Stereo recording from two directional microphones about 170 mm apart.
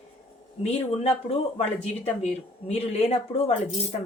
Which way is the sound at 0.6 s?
35° left (ahead or behind).